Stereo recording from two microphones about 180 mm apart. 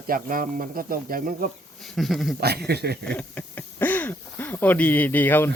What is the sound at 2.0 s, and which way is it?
Speech, centre (ahead or behind).